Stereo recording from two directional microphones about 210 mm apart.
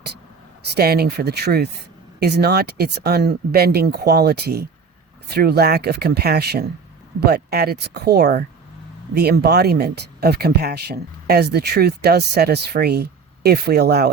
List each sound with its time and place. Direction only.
0.8 s speech: 50° right (ahead or behind)